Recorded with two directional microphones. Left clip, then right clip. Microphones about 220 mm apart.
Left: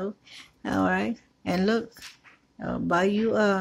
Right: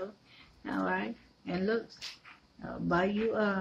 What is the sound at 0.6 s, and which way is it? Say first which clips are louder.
Speech: left 8 dB; 50° left (ahead or behind).